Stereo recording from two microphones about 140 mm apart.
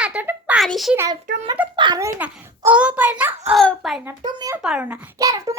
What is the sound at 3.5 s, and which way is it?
Speech, 5° left (ahead or behind).